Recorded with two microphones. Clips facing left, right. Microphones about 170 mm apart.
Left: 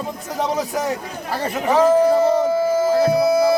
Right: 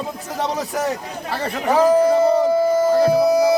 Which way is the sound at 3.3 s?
15° right (ahead or behind).